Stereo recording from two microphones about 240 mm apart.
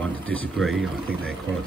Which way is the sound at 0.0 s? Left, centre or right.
Centre.